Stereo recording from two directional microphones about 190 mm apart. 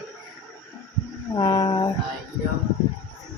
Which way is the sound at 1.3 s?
25° left (ahead or behind).